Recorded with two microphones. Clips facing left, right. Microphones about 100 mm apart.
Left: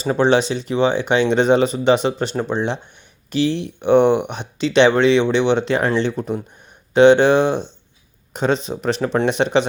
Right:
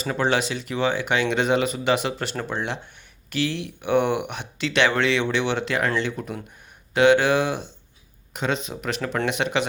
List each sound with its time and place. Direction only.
0.0 s speech: 30° left (ahead or behind)